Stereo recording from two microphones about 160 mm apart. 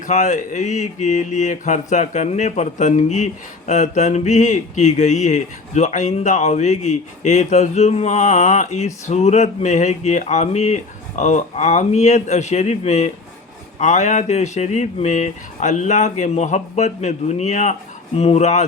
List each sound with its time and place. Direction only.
0.0 s speech: 50° left (ahead or behind)